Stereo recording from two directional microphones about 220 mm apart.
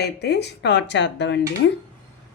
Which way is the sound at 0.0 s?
50° left (ahead or behind).